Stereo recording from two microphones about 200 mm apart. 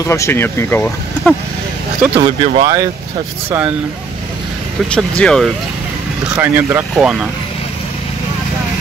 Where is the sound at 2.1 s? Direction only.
25° right (ahead or behind).